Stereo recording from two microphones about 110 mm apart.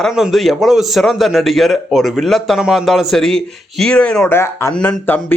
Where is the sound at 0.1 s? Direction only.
Centre (ahead or behind).